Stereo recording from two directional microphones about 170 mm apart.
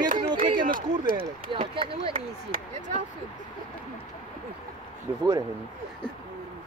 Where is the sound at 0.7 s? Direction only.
55° right (ahead or behind).